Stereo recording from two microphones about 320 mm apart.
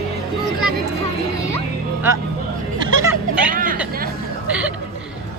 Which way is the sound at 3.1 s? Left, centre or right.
Centre.